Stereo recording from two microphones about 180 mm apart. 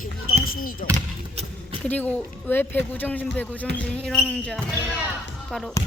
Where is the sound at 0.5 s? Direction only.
55° left (ahead or behind).